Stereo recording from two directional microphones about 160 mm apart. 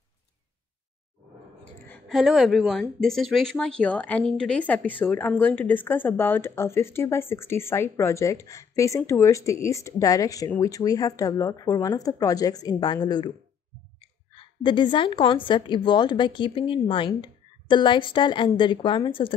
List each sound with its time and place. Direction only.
2.0 s speech: centre (ahead or behind); by 13.3 s 25° left (ahead or behind)
14.3 s a woman's voice: 30° left (ahead or behind)